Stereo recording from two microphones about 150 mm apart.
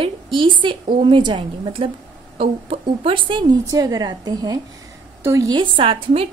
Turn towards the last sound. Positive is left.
turn(degrees=-35)  # may be behind; listen again after turning